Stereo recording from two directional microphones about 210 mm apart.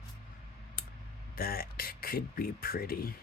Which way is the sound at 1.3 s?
45° left (ahead or behind).